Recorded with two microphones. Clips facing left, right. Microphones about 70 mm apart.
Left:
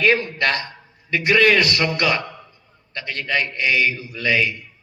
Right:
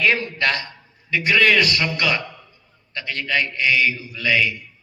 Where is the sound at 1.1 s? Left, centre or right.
Left.